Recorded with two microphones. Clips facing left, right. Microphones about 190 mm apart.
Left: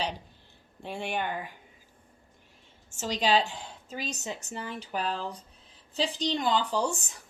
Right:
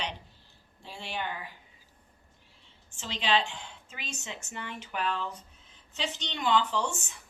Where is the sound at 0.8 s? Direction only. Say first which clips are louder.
Left 5 dB; 55° left (ahead or behind).